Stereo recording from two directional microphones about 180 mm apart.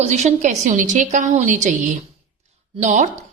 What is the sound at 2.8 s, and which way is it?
Speech, 45° right (ahead or behind).